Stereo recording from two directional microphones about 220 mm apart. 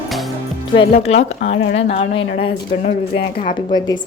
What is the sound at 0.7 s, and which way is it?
A woman's voice, 25° left (ahead or behind).